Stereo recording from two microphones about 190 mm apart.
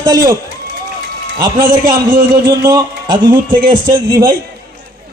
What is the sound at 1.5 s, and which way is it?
Speech, 50° right (ahead or behind).